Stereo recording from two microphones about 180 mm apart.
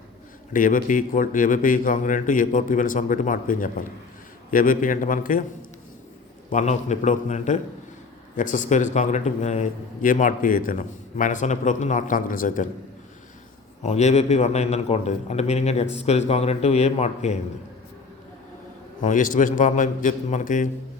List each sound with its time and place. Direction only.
0.5 s a man's voice: 50° left (ahead or behind)
6.5 s a man's voice: 40° left (ahead or behind)
13.8 s a man's voice: 40° left (ahead or behind)
19.0 s a man's voice: 45° left (ahead or behind)